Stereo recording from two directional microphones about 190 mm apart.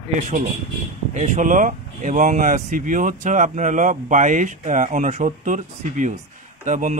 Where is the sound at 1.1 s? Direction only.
40° right (ahead or behind).